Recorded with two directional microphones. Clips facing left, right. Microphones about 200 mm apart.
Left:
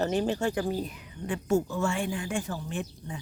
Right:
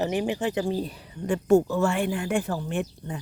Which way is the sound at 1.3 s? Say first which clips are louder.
Right 7 dB; 55° right (ahead or behind).